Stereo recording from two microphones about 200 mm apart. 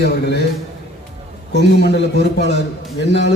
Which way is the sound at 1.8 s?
55° left (ahead or behind).